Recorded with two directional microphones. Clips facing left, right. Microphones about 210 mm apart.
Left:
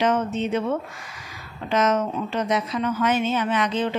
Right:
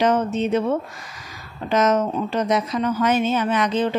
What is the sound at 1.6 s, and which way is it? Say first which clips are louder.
Speech: right 3 dB; 40° right (ahead or behind).